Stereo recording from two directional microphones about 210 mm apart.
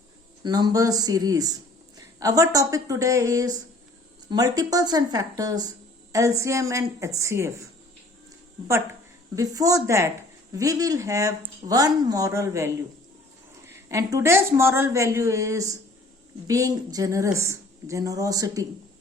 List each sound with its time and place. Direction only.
0.4 s speech: 20° right (ahead or behind)
9.3 s speech: 15° right (ahead or behind)